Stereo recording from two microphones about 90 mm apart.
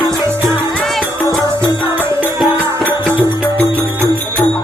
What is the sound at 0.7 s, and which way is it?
Music, 5° left (ahead or behind).